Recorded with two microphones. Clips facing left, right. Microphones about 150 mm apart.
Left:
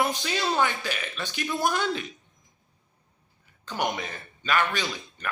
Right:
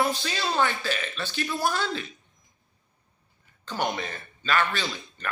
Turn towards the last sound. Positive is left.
turn(degrees=15)  # may be behind; listen again after turning